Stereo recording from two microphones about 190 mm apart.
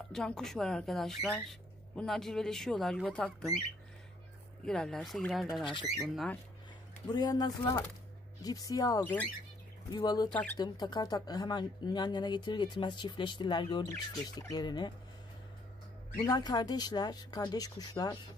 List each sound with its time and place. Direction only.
0.1 s speech: centre (ahead or behind)
4.6 s speech: 5° left (ahead or behind)
5.7 s speech: 25° left (ahead or behind)
5.9 s speech: centre (ahead or behind)
7.1 s speech: 20° left (ahead or behind)
16.2 s speech: 20° left (ahead or behind)